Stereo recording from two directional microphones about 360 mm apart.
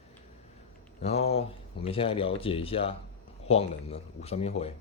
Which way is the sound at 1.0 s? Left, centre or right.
Centre.